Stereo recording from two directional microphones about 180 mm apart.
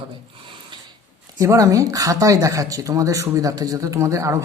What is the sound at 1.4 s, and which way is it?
Speech, 15° right (ahead or behind).